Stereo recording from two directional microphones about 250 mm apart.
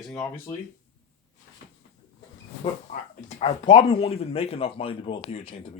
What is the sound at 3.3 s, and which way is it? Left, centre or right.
Speech, left.